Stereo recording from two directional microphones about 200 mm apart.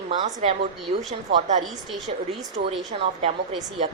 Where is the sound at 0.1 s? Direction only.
35° right (ahead or behind).